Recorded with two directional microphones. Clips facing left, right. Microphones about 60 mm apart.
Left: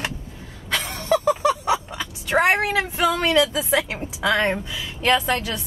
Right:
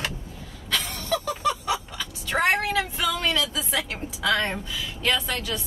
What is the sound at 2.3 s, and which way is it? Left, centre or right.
A woman's voice, left.